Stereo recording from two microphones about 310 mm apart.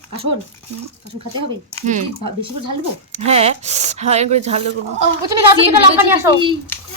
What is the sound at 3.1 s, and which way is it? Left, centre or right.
Speech, centre.